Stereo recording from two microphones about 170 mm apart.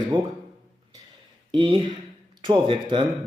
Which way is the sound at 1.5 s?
30° right (ahead or behind).